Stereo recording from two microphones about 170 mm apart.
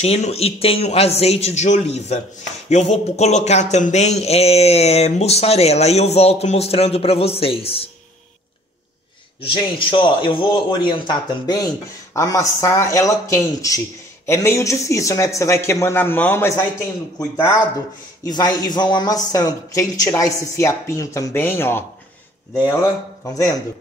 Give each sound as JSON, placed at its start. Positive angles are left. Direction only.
{"t": 0.0, "sound": "speech", "side_deg": 35}
{"t": 9.4, "sound": "a man's voice", "side_deg": 30}
{"t": 18.2, "sound": "a man's voice", "side_deg": 20}
{"t": 23.2, "sound": "a man's voice", "side_deg": 20}